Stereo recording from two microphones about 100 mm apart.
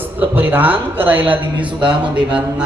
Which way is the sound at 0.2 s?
20° right (ahead or behind).